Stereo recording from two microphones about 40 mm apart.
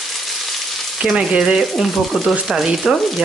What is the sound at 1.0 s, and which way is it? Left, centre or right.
Speech, right.